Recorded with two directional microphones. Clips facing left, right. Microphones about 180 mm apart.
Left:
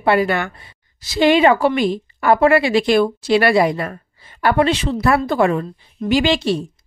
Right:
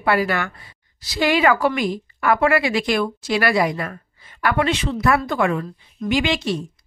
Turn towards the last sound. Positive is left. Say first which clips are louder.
# left 4 dB
turn(degrees=30)  # may be behind; listen again after turning